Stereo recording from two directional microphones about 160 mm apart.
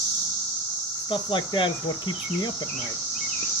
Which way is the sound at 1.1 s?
30° left (ahead or behind).